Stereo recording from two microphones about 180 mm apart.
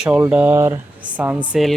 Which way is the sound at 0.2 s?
10° right (ahead or behind).